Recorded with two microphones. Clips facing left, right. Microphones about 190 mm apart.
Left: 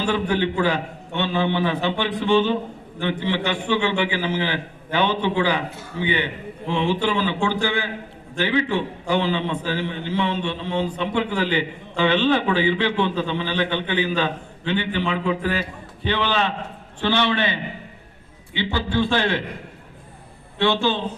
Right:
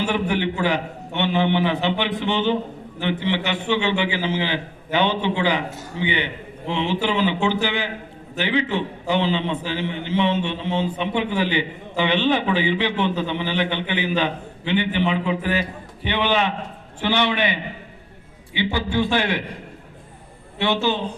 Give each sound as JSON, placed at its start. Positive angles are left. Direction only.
{"t": 0.0, "sound": "a man's voice", "side_deg": -20}
{"t": 20.7, "sound": "a man's voice", "side_deg": -15}